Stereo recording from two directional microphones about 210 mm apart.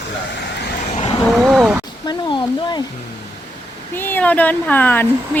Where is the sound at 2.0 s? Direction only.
20° left (ahead or behind).